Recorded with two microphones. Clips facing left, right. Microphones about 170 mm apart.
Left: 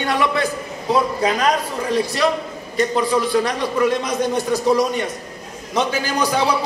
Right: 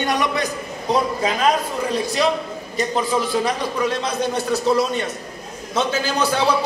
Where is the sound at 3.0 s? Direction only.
Centre (ahead or behind).